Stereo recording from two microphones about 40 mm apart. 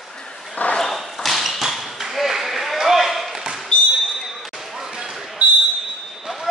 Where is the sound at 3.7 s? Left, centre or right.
Left.